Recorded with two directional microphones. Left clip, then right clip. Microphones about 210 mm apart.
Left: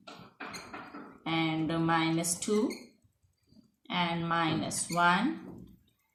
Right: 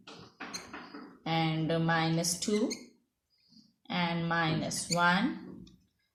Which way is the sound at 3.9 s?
40° right (ahead or behind).